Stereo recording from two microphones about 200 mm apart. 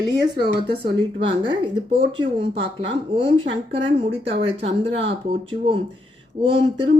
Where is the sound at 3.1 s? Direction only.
25° right (ahead or behind).